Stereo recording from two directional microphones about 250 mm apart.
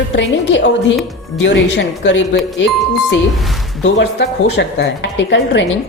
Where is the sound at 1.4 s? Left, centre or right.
Left.